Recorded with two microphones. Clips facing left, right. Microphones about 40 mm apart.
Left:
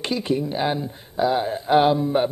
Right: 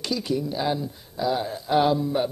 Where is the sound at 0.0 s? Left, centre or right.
Left.